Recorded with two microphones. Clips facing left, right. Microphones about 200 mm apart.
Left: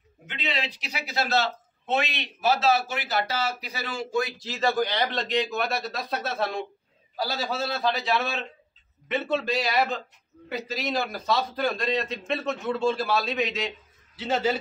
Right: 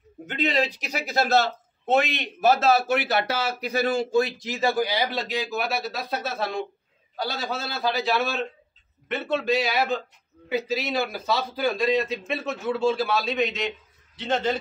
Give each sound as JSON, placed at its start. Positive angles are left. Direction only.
{"t": 0.3, "sound": "speech", "side_deg": -45}
{"t": 4.4, "sound": "a man's voice", "side_deg": -15}